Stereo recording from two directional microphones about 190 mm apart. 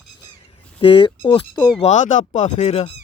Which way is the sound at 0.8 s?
25° left (ahead or behind).